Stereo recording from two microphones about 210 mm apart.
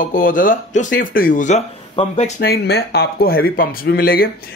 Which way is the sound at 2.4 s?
50° left (ahead or behind).